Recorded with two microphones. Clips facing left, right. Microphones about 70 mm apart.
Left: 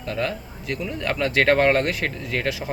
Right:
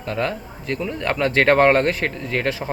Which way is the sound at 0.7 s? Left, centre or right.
Centre.